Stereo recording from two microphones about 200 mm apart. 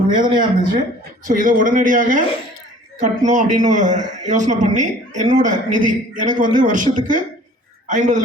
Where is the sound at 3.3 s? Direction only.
40° right (ahead or behind).